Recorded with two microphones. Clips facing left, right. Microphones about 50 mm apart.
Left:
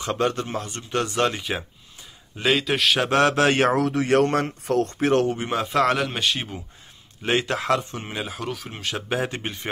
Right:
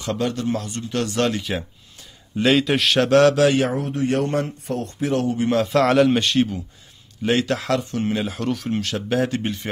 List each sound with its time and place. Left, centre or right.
0.0 s a man's voice: left
0.9 s speech: centre
2.3 s a man's voice: centre
3.1 s speech: centre
3.3 s a man's voice: left
3.7 s speech: left
5.5 s a man's voice: centre
7.2 s speech: centre
8.2 s a man's voice: centre
8.8 s speech: centre